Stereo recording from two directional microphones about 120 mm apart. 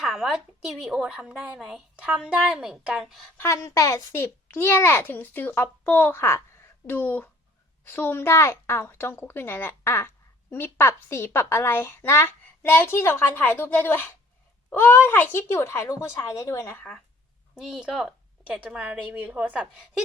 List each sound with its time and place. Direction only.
0.0 s a woman's voice: 5° right (ahead or behind)
3.3 s a woman's voice: 25° left (ahead or behind)
17.5 s a woman's voice: 5° right (ahead or behind)